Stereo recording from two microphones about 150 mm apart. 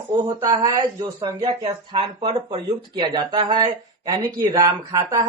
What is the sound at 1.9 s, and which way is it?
A man's voice, 30° right (ahead or behind).